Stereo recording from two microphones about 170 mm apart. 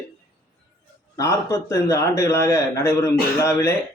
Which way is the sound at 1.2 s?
15° left (ahead or behind).